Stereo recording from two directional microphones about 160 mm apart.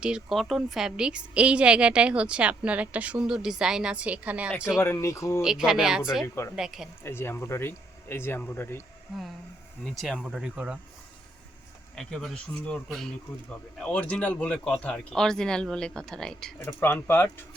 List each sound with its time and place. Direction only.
0.0 s a woman's voice: 5° right (ahead or behind)
4.8 s speech: 15° left (ahead or behind)
5.4 s speech: 5° right (ahead or behind)
6.2 s speech: 15° left (ahead or behind)
6.6 s speech: 5° right (ahead or behind)
7.0 s speech: 15° left (ahead or behind)
10.0 s speech: centre (ahead or behind)
11.9 s speech: 5° left (ahead or behind)